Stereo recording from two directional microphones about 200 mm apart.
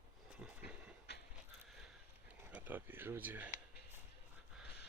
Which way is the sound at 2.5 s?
10° right (ahead or behind).